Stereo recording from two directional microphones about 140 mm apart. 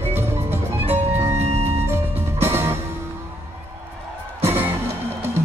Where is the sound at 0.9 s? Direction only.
15° right (ahead or behind).